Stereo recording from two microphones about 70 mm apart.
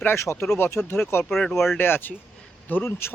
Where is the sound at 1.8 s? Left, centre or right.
Left.